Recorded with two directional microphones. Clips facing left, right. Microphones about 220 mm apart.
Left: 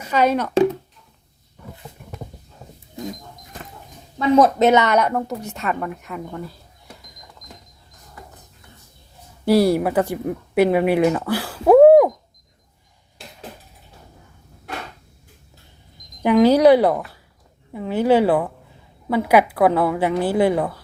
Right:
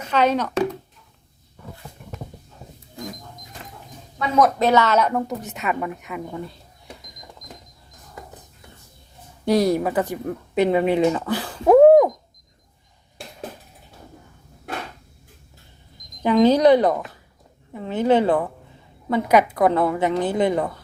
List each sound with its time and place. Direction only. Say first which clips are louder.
0.0 s speech: left 1 dB; 10° left (ahead or behind)
4.4 s speech: left 2 dB; 25° left (ahead or behind)
5.5 s a woman's voice: even; centre (ahead or behind)
9.5 s speech: left 3 dB; 10° left (ahead or behind)
16.2 s a woman's voice: left 2 dB; 10° left (ahead or behind)